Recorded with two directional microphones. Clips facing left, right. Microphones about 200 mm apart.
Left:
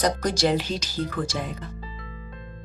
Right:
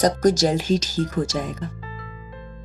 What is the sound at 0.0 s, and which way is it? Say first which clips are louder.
Speech: right 5 dB; 45° right (ahead or behind).